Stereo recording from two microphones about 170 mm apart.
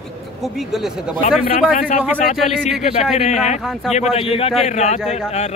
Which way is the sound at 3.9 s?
40° left (ahead or behind).